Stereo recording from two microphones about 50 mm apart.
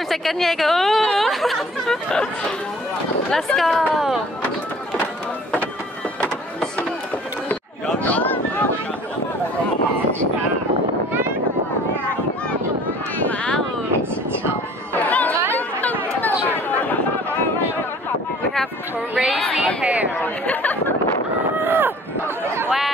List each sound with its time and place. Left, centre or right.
0.1 s speech: centre
3.3 s speech: centre
3.9 s speech: centre
8.0 s a sound: left
15.0 s chatter: left
19.1 s speech: centre
20.2 s speech: left
21.5 s a sound: right